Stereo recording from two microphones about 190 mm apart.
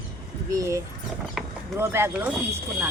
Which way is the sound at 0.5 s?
15° right (ahead or behind).